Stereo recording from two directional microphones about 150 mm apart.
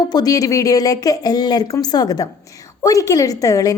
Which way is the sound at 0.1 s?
25° left (ahead or behind).